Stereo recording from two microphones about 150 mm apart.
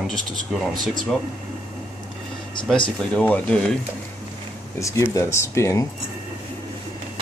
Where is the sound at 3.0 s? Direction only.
10° left (ahead or behind).